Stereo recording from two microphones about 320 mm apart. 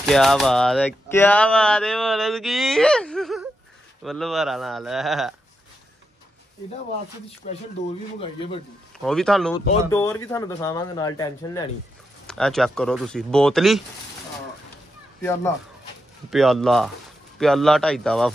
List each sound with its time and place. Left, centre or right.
0.0 s speech: centre
7.4 s speech: left
9.0 s speech: centre
16.3 s speech: centre